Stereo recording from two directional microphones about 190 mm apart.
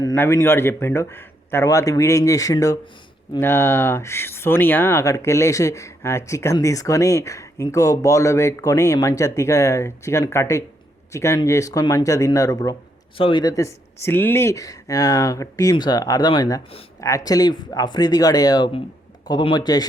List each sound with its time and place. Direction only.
0.0 s speech: 15° left (ahead or behind)